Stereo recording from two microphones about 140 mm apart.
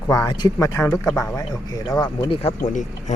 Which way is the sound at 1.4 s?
25° left (ahead or behind).